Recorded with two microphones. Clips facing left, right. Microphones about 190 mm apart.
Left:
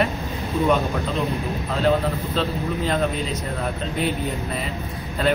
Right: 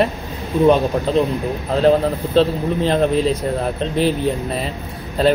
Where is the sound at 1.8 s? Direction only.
35° right (ahead or behind).